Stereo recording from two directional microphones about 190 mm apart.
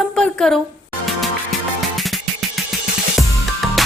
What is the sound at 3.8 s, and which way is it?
Music, centre (ahead or behind).